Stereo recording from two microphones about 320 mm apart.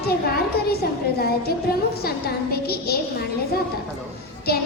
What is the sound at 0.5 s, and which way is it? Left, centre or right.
A woman's voice, left.